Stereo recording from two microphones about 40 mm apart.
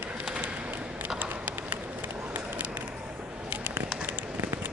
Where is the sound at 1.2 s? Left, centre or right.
Right.